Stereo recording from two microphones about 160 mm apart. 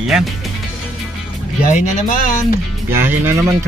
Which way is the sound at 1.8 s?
55° left (ahead or behind).